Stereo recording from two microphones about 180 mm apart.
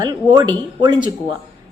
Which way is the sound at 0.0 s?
20° right (ahead or behind).